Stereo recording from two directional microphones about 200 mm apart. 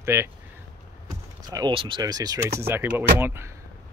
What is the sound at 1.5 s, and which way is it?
Speech, 20° right (ahead or behind).